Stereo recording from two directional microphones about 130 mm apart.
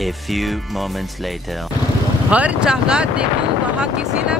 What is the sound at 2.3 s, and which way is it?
Speech, 10° right (ahead or behind).